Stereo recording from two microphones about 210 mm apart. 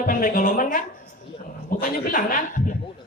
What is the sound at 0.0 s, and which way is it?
Speech, 40° left (ahead or behind).